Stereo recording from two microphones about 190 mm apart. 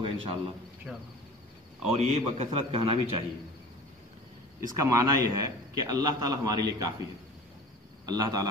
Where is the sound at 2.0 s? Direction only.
35° right (ahead or behind).